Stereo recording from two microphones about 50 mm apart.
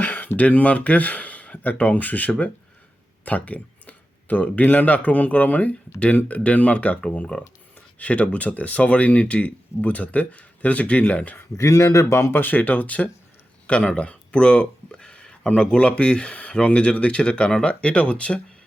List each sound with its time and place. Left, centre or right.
0.0 s speech: left
11.5 s speech: left
12.3 s speech: left
12.5 s speech: left